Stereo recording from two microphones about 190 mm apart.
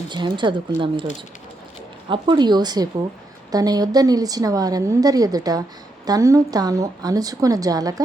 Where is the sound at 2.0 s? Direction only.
25° right (ahead or behind).